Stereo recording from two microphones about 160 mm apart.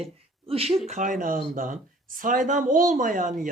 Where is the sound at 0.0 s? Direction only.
35° right (ahead or behind).